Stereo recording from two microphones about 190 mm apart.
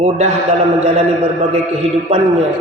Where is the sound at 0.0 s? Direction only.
40° right (ahead or behind).